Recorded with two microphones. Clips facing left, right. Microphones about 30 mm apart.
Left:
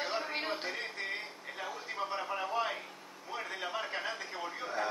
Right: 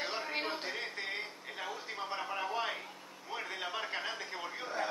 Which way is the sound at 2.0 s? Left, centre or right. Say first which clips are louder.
Even; centre.